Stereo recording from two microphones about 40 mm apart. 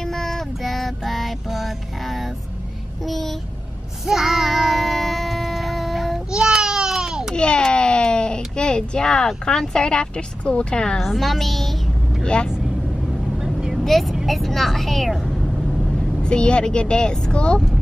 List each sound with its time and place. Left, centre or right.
0.0 s child singing: centre
3.1 s vehicle: centre
4.0 s a sound: centre
6.3 s baby cry: centre
7.3 s a sound: left
10.5 s a woman's voice: left
11.0 s a woman's voice: centre
12.2 s speech: left
13.4 s vehicle: centre
13.8 s speech: centre
16.2 s a woman's voice: left